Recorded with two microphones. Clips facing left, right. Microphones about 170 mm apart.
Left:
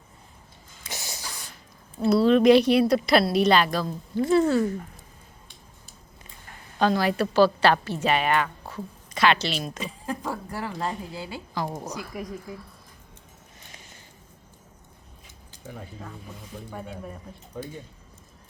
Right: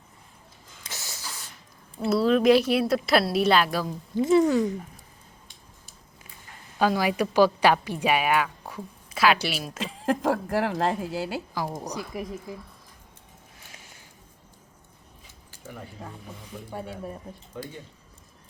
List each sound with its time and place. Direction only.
0.9 s a sound: 15° left (ahead or behind)
2.0 s speech: centre (ahead or behind)
6.7 s a woman's voice: 10° right (ahead or behind)
9.8 s a woman's voice: 90° right
11.9 s speech: centre (ahead or behind)
13.7 s a sound: 10° right (ahead or behind)